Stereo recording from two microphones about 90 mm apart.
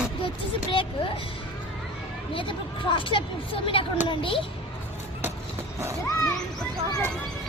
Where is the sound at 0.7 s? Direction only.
75° left (ahead or behind).